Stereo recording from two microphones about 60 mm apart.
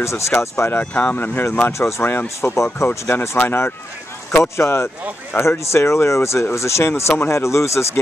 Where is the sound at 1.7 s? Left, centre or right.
Left.